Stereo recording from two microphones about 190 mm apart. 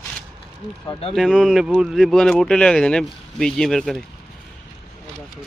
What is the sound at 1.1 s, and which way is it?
Speech, centre (ahead or behind).